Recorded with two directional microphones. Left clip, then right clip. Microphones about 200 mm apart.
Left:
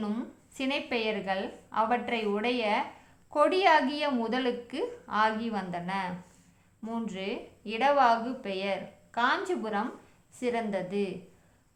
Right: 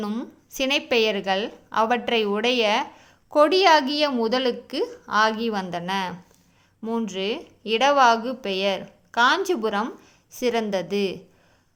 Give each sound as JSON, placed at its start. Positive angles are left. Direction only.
{"t": 0.0, "sound": "a woman's voice", "side_deg": -30}